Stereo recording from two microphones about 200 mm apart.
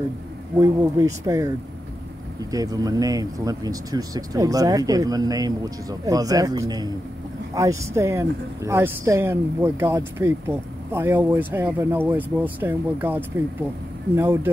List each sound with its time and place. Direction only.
0.6 s speech: 15° right (ahead or behind)
2.5 s speech: 20° right (ahead or behind)